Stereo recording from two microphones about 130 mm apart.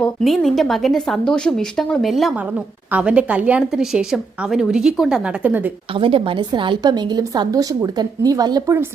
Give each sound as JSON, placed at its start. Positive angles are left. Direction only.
{"t": 0.0, "sound": "a woman's voice", "side_deg": 5}
{"t": 5.9, "sound": "a woman's voice", "side_deg": -45}